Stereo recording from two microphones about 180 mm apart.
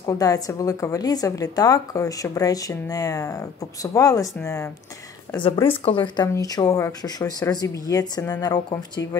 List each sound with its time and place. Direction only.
0.0 s a woman's voice: 20° left (ahead or behind)
5.9 s a woman's voice: 25° left (ahead or behind)